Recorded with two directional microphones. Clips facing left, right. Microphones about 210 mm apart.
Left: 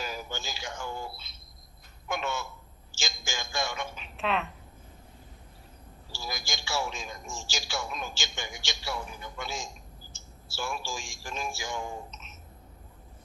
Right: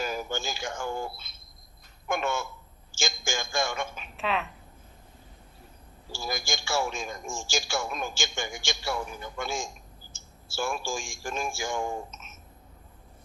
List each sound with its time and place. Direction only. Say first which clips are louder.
0.0 s a man's voice: right 5 dB; 50° right (ahead or behind)
4.2 s a woman's voice: even; centre (ahead or behind)
6.1 s a man's voice: right 5 dB; 50° right (ahead or behind)